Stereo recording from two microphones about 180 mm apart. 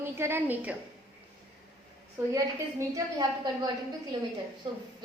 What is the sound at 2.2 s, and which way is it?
A woman's voice, 15° right (ahead or behind).